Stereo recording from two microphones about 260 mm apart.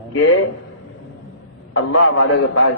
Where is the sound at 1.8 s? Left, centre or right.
Left.